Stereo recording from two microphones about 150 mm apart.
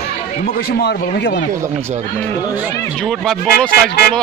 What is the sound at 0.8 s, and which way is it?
Speech, 90° left.